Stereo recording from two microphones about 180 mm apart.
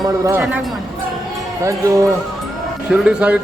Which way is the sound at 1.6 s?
20° right (ahead or behind).